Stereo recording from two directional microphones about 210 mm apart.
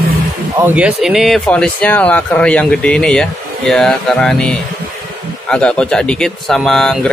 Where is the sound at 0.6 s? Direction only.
5° right (ahead or behind).